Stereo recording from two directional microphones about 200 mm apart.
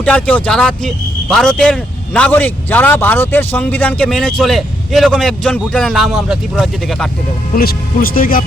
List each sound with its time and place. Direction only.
0.0 s speech: 5° left (ahead or behind)
7.5 s speech: 50° left (ahead or behind)